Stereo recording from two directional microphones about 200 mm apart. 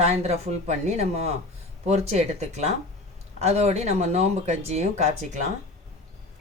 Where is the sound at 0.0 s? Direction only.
35° right (ahead or behind).